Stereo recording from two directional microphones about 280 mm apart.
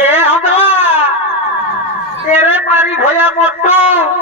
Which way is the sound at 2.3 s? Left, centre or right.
Centre.